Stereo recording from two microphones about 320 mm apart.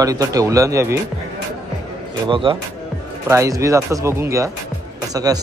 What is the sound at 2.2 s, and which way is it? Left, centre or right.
Speech, centre.